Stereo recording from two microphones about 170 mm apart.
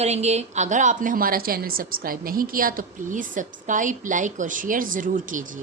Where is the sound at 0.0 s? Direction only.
40° right (ahead or behind).